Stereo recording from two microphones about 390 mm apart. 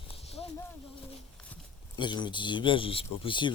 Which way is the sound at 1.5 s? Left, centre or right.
Centre.